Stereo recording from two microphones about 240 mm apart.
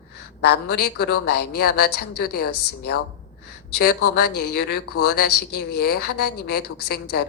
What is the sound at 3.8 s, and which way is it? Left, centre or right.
A woman's voice, left.